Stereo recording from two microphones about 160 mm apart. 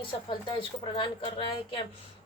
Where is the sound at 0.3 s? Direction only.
30° left (ahead or behind).